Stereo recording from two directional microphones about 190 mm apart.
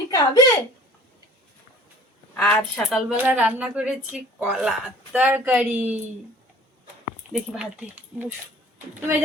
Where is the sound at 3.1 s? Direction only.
10° right (ahead or behind).